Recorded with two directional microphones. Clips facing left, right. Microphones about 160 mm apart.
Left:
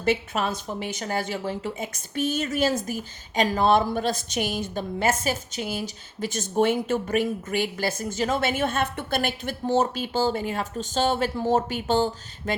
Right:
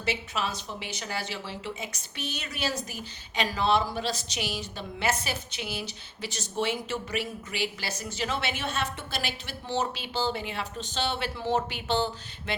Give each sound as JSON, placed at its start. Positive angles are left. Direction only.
{"t": 0.0, "sound": "speech", "side_deg": 50}